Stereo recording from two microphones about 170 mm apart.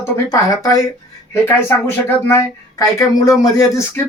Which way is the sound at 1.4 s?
10° left (ahead or behind).